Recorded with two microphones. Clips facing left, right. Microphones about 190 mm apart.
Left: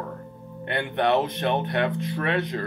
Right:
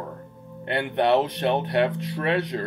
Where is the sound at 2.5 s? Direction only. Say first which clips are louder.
Right 1 dB; 30° right (ahead or behind).